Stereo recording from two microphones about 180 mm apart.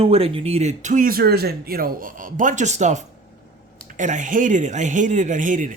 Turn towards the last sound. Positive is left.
turn(degrees=-45)  # may be behind; listen again after turning